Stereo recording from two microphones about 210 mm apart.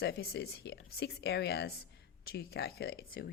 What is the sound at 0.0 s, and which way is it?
Speech, 50° left (ahead or behind).